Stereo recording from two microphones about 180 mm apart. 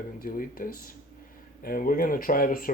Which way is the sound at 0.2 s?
50° left (ahead or behind).